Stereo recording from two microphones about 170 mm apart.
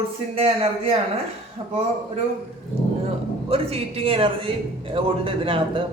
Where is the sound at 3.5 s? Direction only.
35° right (ahead or behind).